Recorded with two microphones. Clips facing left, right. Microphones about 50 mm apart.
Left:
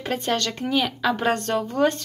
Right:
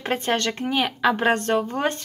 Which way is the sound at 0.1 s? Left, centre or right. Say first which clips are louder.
Right 1 dB; right.